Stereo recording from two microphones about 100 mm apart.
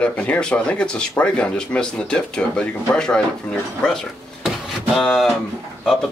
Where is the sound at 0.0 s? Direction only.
15° left (ahead or behind).